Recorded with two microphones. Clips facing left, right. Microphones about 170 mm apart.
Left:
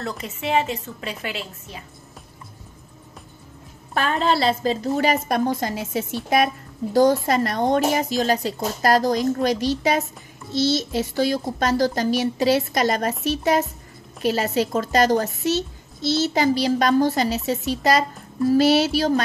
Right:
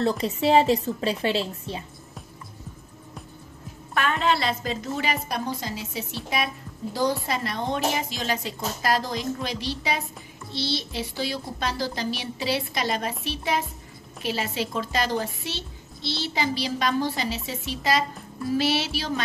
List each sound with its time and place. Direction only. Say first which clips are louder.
0.2 s a woman's voice: right 1 dB; 35° right (ahead or behind)
3.9 s a woman's voice: left 3 dB; 35° left (ahead or behind)